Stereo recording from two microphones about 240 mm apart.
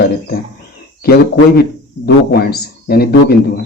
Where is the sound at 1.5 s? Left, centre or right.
Left.